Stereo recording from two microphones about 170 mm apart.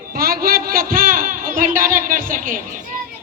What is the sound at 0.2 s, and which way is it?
Music, 60° right (ahead or behind).